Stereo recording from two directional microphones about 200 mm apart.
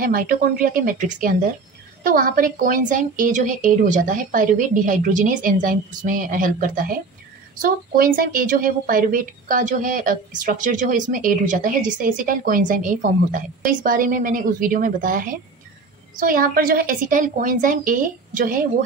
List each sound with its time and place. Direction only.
0.0 s a woman's voice: 45° right (ahead or behind)